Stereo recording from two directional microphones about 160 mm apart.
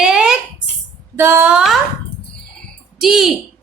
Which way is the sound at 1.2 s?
15° right (ahead or behind).